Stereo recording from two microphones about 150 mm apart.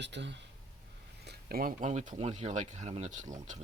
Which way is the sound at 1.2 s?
90° right.